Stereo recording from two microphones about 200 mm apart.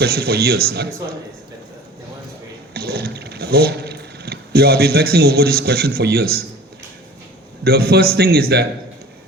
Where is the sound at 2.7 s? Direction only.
50° right (ahead or behind).